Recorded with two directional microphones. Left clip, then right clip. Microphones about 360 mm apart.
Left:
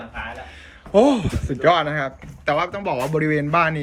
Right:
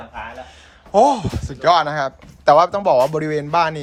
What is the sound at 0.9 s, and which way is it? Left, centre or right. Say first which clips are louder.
Speech: right 2 dB; centre.